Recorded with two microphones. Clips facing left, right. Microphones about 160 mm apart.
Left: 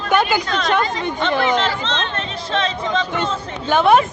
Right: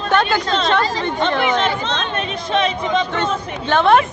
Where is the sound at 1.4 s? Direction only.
15° right (ahead or behind).